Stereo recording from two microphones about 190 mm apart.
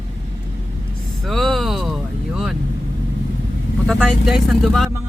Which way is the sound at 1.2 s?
Centre (ahead or behind).